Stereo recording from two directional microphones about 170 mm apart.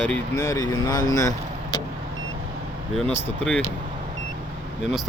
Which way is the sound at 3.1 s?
5° left (ahead or behind).